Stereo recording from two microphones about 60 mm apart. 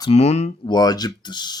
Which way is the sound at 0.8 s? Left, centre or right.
Left.